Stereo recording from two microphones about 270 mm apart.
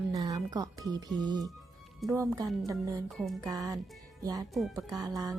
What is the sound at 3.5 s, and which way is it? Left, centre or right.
Speech, centre.